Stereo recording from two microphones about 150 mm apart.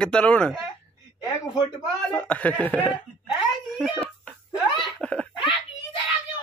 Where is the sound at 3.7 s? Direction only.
5° right (ahead or behind).